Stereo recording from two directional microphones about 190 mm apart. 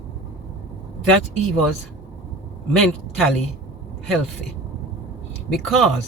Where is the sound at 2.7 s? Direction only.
Centre (ahead or behind).